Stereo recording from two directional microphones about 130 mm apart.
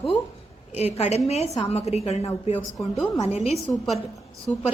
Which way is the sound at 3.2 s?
55° left (ahead or behind).